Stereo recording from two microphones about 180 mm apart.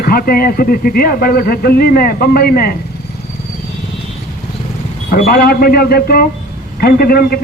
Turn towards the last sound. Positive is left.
turn(degrees=55)  # may be behind; listen again after turning